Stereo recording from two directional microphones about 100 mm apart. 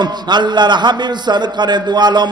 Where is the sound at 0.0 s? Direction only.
45° right (ahead or behind).